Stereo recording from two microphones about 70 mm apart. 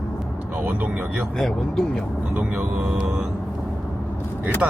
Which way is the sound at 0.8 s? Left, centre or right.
Right.